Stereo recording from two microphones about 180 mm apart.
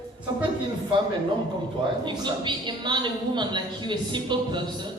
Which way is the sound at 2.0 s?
25° right (ahead or behind).